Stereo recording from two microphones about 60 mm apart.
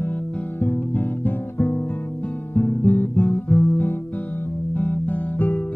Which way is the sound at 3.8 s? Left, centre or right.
Left.